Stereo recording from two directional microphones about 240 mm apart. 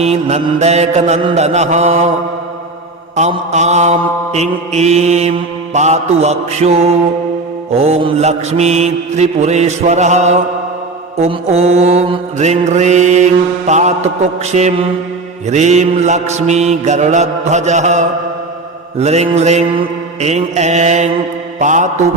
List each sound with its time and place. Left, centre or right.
0.0 s mantra: right
3.2 s mantra: right